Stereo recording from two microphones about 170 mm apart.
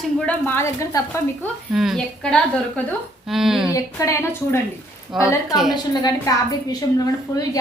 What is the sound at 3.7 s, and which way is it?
Speech, 20° left (ahead or behind).